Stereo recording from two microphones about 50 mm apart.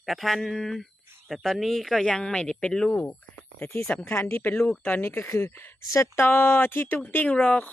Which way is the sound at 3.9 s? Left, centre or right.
Left.